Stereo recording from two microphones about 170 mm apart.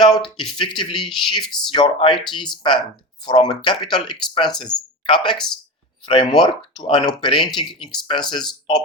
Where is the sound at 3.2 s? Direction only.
25° left (ahead or behind).